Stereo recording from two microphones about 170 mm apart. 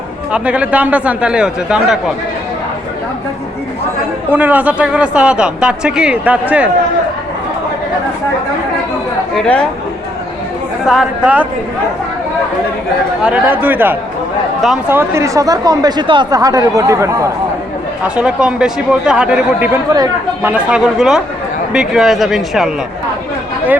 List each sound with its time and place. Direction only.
0.3 s speech: 5° right (ahead or behind)
4.3 s speech: 10° right (ahead or behind)
9.3 s speech: 5° left (ahead or behind)
10.8 s speech: 5° right (ahead or behind)
13.2 s speech: 10° right (ahead or behind)
18.0 s speech: 5° right (ahead or behind)
19.9 s speech: 20° right (ahead or behind)
20.5 s speech: 5° right (ahead or behind)